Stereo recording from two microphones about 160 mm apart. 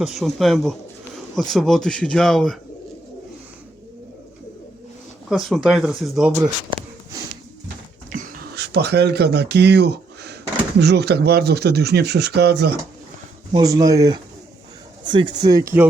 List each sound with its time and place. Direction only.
0.0 s speech: centre (ahead or behind)
5.3 s speech: 5° right (ahead or behind)
6.4 s a sound: 25° right (ahead or behind)
8.1 s dog: 55° right (ahead or behind)
8.5 s speech: 90° right
13.5 s speech: 25° right (ahead or behind)